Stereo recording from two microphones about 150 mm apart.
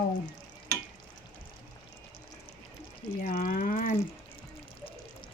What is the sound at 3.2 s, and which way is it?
Speech, 60° left (ahead or behind).